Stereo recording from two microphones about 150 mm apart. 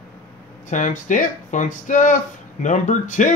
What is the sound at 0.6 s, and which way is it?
Speech, 55° left (ahead or behind).